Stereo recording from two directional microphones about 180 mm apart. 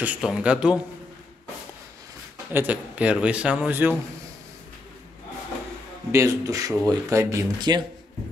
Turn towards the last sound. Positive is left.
turn(degrees=-20)  # may be behind; listen again after turning